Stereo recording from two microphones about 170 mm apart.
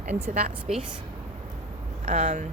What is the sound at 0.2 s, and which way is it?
Speech, 40° right (ahead or behind).